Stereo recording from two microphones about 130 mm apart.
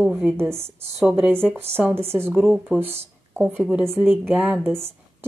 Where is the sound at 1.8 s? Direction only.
15° right (ahead or behind).